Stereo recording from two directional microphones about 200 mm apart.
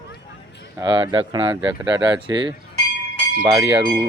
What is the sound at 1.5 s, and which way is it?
Speech, 5° right (ahead or behind).